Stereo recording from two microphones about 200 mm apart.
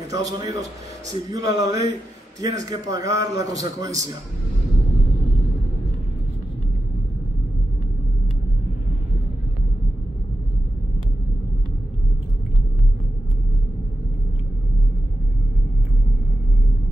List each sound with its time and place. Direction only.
0.1 s a man's voice: 15° right (ahead or behind)